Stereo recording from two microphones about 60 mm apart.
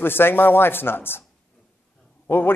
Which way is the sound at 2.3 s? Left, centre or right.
Left.